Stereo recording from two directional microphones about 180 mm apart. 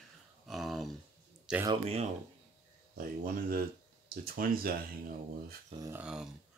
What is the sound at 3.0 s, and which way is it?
Speech, 50° right (ahead or behind).